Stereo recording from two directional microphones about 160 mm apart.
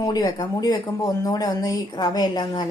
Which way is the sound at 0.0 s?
25° left (ahead or behind).